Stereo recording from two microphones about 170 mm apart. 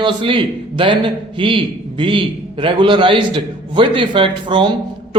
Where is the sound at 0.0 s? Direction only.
30° right (ahead or behind).